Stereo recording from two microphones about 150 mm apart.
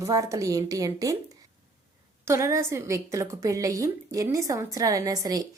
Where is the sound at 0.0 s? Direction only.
20° right (ahead or behind).